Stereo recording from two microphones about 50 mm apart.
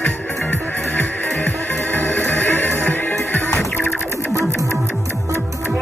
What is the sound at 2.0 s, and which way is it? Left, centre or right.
Music, left.